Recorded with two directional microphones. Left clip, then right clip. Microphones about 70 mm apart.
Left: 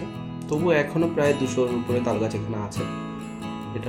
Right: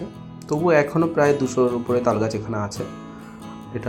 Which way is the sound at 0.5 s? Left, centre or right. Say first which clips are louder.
Right 4 dB; right.